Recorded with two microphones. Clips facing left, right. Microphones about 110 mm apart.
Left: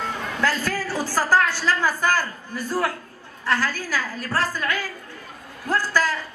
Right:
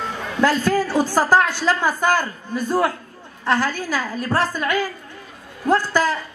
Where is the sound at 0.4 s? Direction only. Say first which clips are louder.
Right 7 dB; 20° right (ahead or behind).